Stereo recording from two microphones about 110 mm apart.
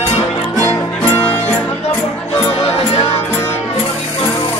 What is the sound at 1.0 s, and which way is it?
Music, 20° left (ahead or behind).